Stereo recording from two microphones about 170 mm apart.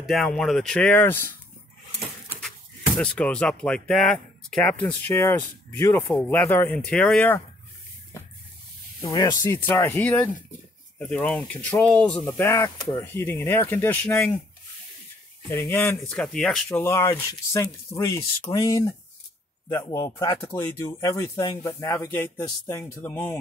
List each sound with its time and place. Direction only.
0.0 s speech: centre (ahead or behind)
3.0 s speech: 5° left (ahead or behind)
9.0 s speech: 20° left (ahead or behind)
15.4 s speech: 15° left (ahead or behind)